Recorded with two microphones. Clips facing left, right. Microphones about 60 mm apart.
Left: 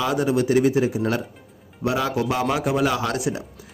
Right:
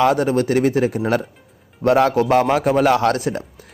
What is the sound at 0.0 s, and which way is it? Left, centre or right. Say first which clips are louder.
A man's voice: right 5 dB; right.